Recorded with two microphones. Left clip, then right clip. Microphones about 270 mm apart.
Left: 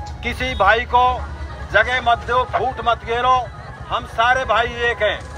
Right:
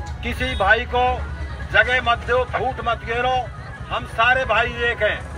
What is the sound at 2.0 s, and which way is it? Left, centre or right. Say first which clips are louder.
Speech: left 2 dB; left.